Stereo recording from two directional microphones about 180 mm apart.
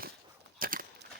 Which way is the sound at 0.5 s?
50° right (ahead or behind).